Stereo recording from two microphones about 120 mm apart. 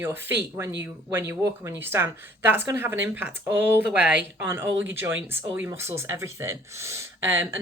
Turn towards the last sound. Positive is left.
turn(degrees=-20)  # may be behind; listen again after turning